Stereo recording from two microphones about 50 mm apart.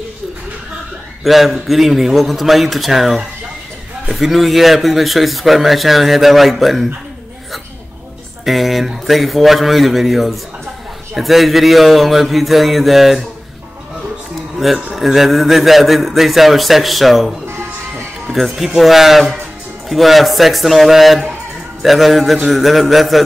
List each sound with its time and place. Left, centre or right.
1.2 s speech: centre
8.5 s speech: centre
14.6 s speech: centre
17.5 s music: right
18.3 s speech: centre